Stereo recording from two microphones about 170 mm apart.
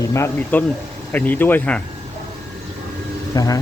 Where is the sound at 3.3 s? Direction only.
20° left (ahead or behind).